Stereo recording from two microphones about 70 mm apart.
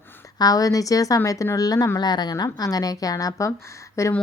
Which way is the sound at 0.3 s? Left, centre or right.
Left.